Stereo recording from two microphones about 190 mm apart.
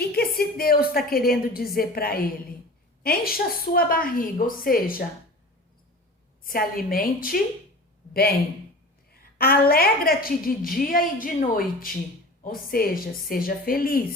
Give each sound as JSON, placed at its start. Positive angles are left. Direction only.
{"t": 0.0, "sound": "a woman's voice", "side_deg": 55}
{"t": 6.4, "sound": "a woman's voice", "side_deg": 50}